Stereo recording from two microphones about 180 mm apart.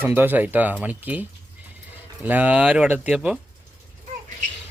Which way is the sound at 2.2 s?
10° right (ahead or behind).